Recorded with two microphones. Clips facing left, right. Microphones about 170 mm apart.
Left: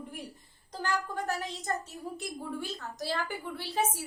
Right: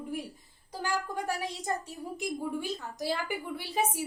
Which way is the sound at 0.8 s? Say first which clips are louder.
Even; 10° right (ahead or behind).